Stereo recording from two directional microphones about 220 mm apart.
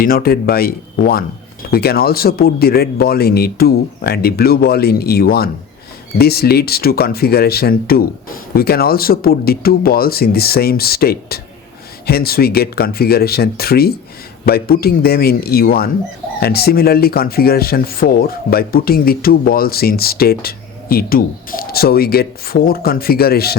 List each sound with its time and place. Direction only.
0.0 s speech: 40° left (ahead or behind)